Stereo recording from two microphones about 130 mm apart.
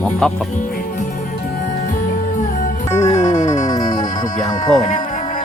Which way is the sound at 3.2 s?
25° left (ahead or behind).